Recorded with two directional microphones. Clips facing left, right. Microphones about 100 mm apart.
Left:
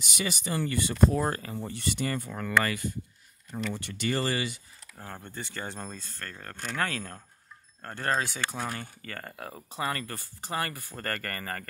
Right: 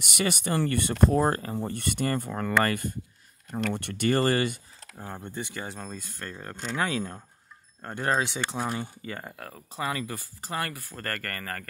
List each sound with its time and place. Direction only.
0.0 s speech: 60° right (ahead or behind)
1.1 s speech: 40° right (ahead or behind)
3.5 s speech: 60° right (ahead or behind)
4.9 s speech: 15° right (ahead or behind)
5.9 s speech: 15° right (ahead or behind)
9.4 s speech: 5° left (ahead or behind)